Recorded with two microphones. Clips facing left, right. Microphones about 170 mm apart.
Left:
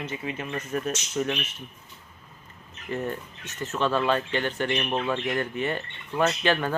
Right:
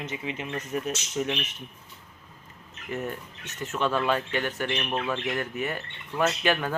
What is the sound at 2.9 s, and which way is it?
Speech, 10° right (ahead or behind).